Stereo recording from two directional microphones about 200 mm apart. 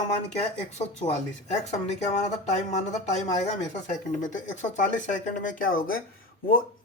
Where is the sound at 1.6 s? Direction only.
35° left (ahead or behind).